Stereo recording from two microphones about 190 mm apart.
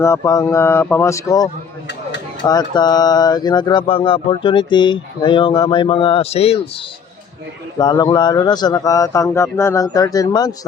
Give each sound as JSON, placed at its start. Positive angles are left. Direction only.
{"t": 0.0, "sound": "speech", "side_deg": 15}
{"t": 7.8, "sound": "speech", "side_deg": 20}